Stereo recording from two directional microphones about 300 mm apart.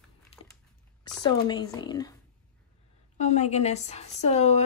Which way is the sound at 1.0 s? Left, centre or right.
Centre.